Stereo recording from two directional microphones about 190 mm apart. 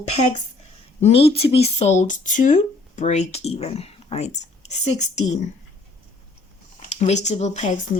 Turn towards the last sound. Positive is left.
turn(degrees=35)  # may be behind; listen again after turning